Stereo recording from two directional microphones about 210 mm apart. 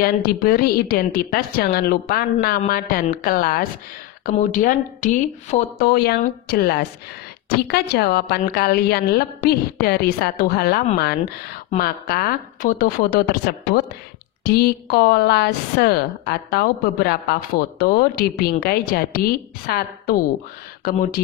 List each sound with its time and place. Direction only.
0.0 s a woman's voice: 45° left (ahead or behind)
14.4 s a woman's voice: 50° left (ahead or behind)